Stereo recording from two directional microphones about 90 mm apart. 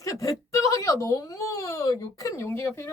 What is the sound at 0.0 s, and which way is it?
Speech, 40° left (ahead or behind).